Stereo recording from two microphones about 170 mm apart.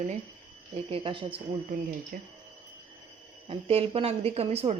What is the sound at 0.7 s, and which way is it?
Speech, 30° right (ahead or behind).